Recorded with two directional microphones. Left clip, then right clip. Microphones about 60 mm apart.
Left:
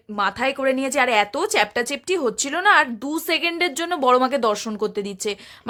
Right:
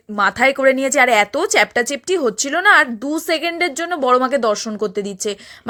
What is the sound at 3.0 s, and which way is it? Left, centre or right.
Speech, right.